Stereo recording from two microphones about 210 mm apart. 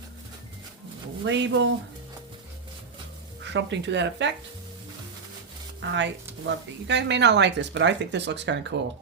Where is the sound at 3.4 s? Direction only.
60° right (ahead or behind).